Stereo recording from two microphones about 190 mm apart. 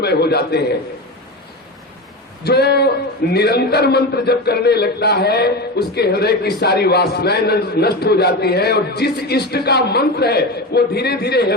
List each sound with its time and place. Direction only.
0.0 s a man's voice: 60° left (ahead or behind)
2.4 s a man's voice: 60° left (ahead or behind)